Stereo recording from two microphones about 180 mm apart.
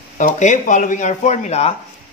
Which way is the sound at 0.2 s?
40° left (ahead or behind).